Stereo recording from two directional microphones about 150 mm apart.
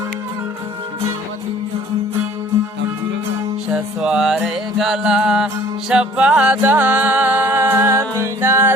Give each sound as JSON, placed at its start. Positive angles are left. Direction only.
{"t": 3.7, "sound": "music", "side_deg": -5}